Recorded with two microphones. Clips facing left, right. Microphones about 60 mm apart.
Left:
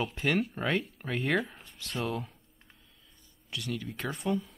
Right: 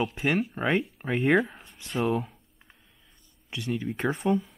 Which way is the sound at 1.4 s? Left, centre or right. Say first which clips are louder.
Right 6 dB; centre.